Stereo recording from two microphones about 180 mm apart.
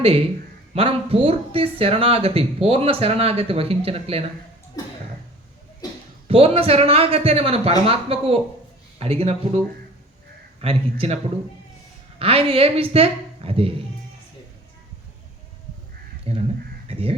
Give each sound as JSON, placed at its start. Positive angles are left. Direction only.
{"t": 0.0, "sound": "speech", "side_deg": -30}
{"t": 4.8, "sound": "a sound", "side_deg": 20}
{"t": 6.2, "sound": "speech", "side_deg": -35}
{"t": 12.2, "sound": "speech", "side_deg": -30}
{"t": 16.3, "sound": "speech", "side_deg": -35}